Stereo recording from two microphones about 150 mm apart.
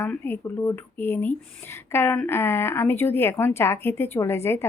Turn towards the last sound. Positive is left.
turn(degrees=15)  # may be behind; listen again after turning